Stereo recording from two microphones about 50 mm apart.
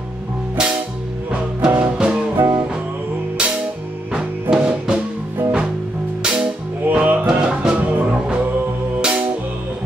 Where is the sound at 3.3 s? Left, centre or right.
Centre.